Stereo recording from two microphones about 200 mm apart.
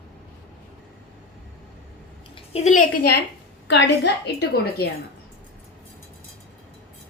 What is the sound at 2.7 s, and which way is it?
Speech, 40° left (ahead or behind).